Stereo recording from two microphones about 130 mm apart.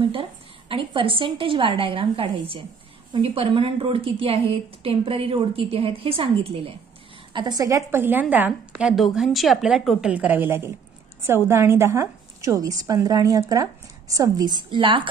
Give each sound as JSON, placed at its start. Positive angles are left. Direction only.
{"t": 0.7, "sound": "a woman's voice", "side_deg": -45}
{"t": 7.3, "sound": "a woman's voice", "side_deg": -30}